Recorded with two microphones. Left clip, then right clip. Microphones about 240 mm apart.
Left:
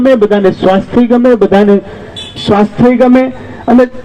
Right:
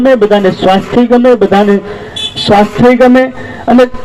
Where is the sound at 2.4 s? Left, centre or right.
Right.